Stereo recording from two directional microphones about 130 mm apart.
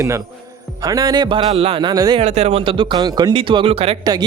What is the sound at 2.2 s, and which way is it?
Speech, 55° right (ahead or behind).